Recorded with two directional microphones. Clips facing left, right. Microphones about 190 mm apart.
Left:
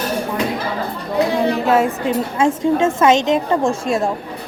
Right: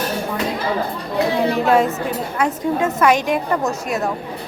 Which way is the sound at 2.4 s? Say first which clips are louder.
Left 4 dB; 25° left (ahead or behind).